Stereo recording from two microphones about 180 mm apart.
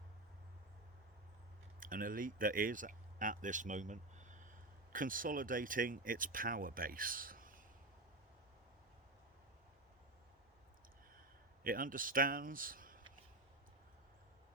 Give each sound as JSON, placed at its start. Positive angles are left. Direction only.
{"t": 1.8, "sound": "speech", "side_deg": -50}
{"t": 11.6, "sound": "speech", "side_deg": -50}